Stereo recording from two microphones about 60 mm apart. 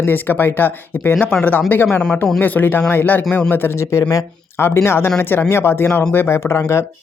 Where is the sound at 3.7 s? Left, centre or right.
Left.